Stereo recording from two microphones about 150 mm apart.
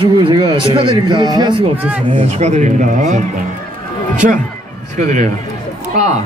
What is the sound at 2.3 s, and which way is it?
Speech, 50° right (ahead or behind).